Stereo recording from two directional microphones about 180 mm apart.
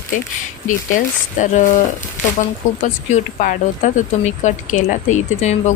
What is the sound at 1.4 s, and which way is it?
Speech, 45° left (ahead or behind).